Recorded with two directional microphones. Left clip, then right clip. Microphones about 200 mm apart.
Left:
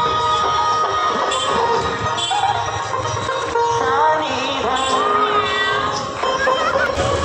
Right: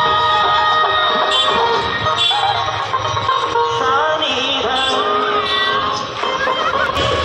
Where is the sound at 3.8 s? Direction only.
45° right (ahead or behind).